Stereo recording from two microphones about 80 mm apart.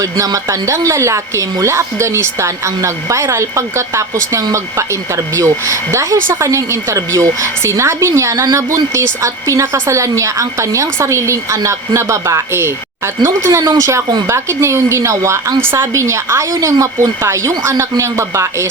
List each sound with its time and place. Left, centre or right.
0.4 s speech: right